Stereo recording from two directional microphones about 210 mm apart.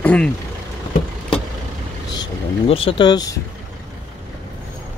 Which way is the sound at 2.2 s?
25° left (ahead or behind).